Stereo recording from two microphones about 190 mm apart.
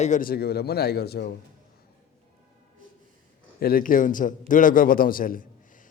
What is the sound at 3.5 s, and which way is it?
A man's voice, 50° left (ahead or behind).